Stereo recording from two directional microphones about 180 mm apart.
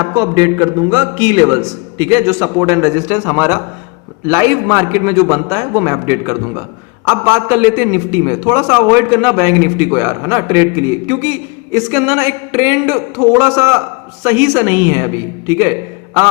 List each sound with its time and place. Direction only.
0.0 s a man's voice: 20° right (ahead or behind)